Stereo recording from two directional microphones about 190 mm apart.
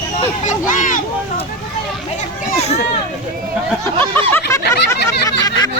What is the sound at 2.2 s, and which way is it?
Children playing, 35° left (ahead or behind).